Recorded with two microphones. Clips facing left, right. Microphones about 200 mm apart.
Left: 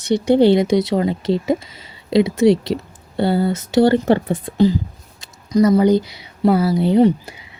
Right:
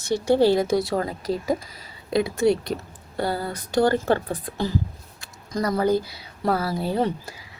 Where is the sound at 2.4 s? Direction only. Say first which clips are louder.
Left 5 dB; 90° left.